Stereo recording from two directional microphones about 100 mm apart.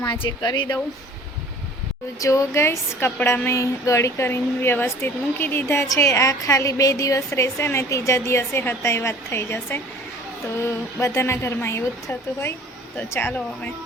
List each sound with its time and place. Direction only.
0.2 s speech: 50° left (ahead or behind)
2.2 s a woman's voice: 30° left (ahead or behind)